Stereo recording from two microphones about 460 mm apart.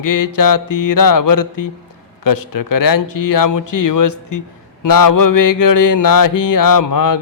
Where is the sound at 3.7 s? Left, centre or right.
Left.